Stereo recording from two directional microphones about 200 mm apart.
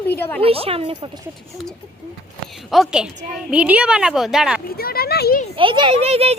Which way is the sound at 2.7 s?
Centre (ahead or behind).